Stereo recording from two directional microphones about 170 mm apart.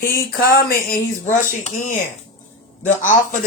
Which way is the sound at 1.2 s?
45° left (ahead or behind).